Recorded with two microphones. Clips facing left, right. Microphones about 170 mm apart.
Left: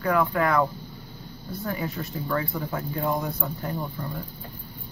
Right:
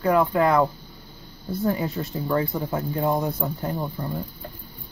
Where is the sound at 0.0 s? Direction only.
20° right (ahead or behind).